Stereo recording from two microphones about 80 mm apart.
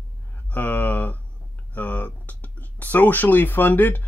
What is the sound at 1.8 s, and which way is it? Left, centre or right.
Speech, centre.